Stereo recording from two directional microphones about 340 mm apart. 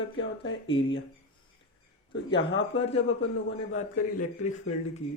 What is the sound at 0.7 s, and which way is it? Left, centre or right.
Speech, centre.